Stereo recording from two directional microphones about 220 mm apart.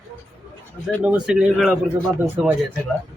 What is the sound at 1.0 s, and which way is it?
Speech, 5° right (ahead or behind).